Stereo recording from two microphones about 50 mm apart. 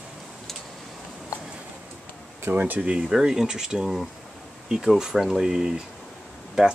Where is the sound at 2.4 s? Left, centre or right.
Right.